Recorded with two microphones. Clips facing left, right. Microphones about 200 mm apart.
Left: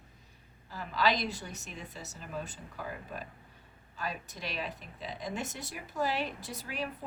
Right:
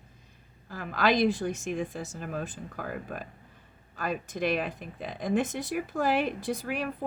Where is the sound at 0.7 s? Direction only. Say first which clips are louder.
Right 4 dB; 55° right (ahead or behind).